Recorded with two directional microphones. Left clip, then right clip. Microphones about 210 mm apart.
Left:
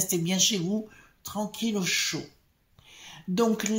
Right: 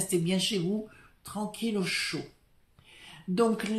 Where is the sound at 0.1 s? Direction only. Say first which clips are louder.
Left 2 dB; 30° left (ahead or behind).